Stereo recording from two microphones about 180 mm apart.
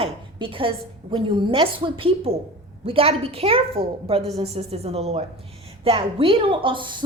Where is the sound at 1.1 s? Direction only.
30° right (ahead or behind).